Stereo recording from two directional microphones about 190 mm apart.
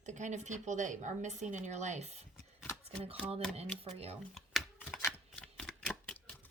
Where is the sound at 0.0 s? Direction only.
40° right (ahead or behind).